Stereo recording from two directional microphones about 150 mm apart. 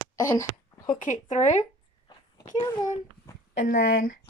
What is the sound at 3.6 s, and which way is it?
Speech, 65° left (ahead or behind).